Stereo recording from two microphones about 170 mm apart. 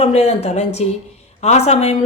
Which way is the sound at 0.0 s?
40° left (ahead or behind).